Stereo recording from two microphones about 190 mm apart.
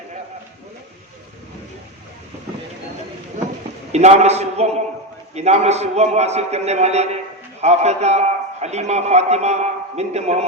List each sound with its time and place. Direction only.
3.9 s a man's voice: 35° right (ahead or behind)